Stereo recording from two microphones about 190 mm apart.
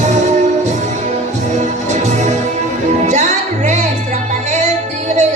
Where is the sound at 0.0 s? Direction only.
40° right (ahead or behind).